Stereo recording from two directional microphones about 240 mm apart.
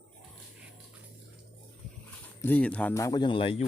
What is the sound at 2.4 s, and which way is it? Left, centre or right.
Speech, centre.